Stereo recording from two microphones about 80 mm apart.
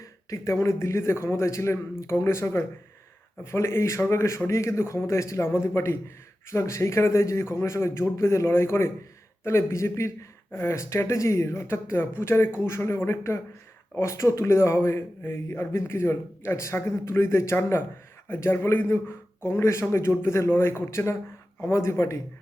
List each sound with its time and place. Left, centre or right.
0.0 s a man's voice: left